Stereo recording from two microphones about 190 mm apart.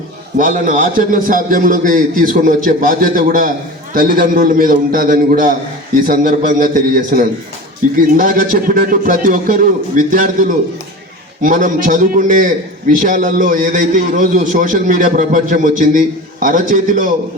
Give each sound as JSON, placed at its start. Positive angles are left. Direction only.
{"t": 0.3, "sound": "a man's voice", "side_deg": -45}